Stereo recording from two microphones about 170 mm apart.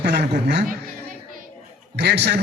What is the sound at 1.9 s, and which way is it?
Speech, 80° right.